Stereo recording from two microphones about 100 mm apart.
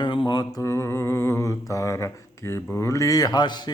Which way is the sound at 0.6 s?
30° left (ahead or behind).